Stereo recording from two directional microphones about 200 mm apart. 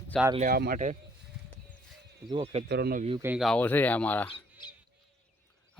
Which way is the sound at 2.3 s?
25° right (ahead or behind).